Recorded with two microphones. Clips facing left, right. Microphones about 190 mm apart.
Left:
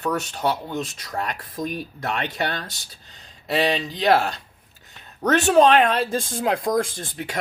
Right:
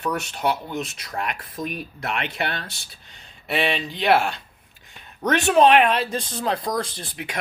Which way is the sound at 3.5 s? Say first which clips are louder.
Left 2 dB; 35° left (ahead or behind).